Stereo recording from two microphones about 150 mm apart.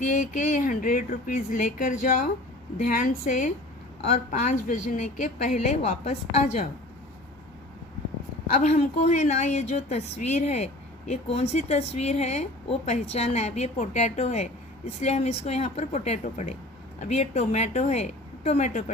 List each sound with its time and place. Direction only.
0.0 s a woman's voice: 55° left (ahead or behind)
8.5 s a woman's voice: 45° left (ahead or behind)